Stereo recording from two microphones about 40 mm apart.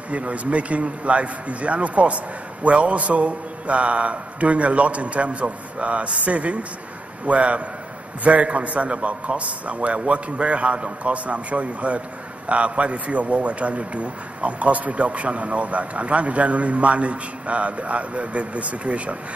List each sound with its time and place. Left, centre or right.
0.1 s speech: right